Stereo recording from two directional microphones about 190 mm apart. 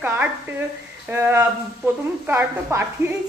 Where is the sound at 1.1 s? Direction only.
15° right (ahead or behind).